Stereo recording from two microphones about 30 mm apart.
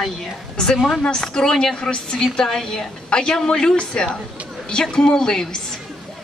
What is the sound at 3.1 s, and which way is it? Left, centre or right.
A man's voice, left.